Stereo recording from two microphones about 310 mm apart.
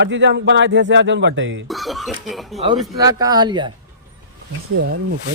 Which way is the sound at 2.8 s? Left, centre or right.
Centre.